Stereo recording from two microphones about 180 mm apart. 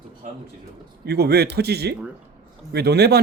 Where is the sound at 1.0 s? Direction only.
65° right (ahead or behind).